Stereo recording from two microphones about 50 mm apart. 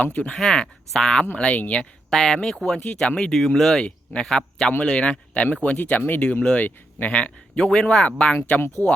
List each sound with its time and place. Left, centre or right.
0.0 s speech: left
0.3 s speech: centre
1.4 s speech: left
2.0 s speech: centre
3.8 s a man's voice: left
8.8 s speech: left